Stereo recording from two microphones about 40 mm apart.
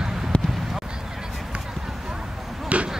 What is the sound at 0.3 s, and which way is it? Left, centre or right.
Run, left.